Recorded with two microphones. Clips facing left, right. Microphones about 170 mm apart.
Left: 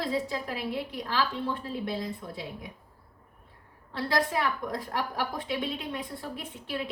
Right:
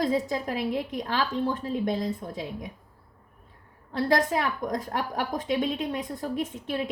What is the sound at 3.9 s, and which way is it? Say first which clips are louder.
A woman's voice: right 4 dB; 40° right (ahead or behind).